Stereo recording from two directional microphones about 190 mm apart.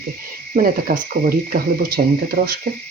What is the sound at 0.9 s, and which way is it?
Speech, 50° right (ahead or behind).